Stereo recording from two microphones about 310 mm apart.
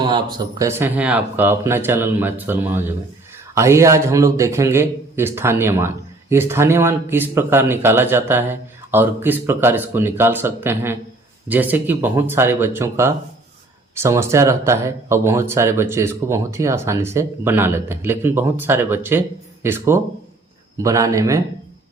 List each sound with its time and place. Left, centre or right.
0.0 s a man's voice: centre